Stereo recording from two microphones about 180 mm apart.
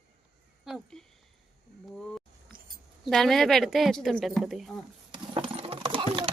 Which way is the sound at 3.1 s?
Centre (ahead or behind).